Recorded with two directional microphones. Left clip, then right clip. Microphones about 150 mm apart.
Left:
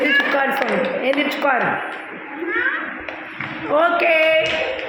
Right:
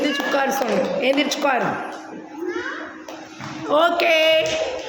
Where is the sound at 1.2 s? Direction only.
20° right (ahead or behind).